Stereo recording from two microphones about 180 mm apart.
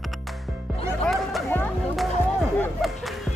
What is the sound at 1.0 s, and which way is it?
Chatter, centre (ahead or behind).